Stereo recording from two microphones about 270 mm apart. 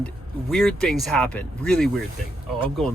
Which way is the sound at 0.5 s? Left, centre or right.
Centre.